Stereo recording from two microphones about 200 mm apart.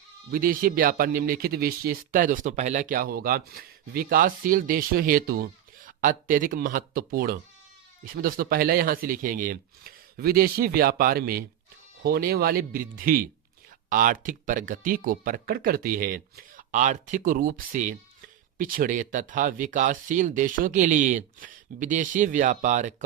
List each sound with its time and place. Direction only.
0.3 s speech: 45° right (ahead or behind)